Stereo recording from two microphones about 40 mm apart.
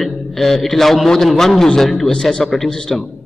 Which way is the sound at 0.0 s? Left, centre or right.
Centre.